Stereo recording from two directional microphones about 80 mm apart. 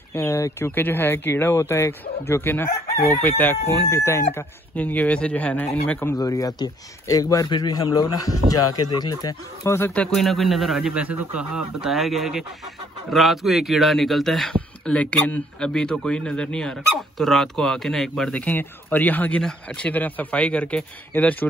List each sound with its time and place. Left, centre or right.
0.1 s speech: left
6.1 s speech: left
7.4 s a man's voice: left
7.7 s speech: left
9.7 s speech: left
10.1 s speech: centre
10.9 s speech: centre
14.5 s speech: centre
18.4 s speech: left